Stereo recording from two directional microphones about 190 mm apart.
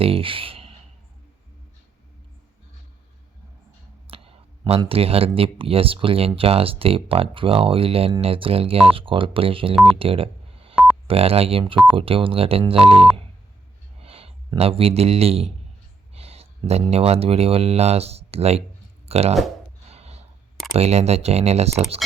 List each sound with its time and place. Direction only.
0.0 s speech: 30° right (ahead or behind)
4.0 s speech: 30° right (ahead or behind)
9.7 s speech: 5° right (ahead or behind)
10.0 s telephone dialing: 30° right (ahead or behind)
11.1 s speech: 30° right (ahead or behind)
19.9 s snort: 35° right (ahead or behind)
20.7 s speech: 35° right (ahead or behind)